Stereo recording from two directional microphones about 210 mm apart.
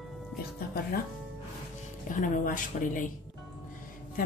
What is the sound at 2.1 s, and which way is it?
Speech, 40° left (ahead or behind).